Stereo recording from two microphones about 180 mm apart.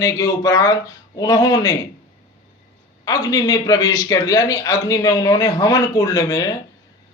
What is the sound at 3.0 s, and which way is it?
A man's voice, 20° left (ahead or behind).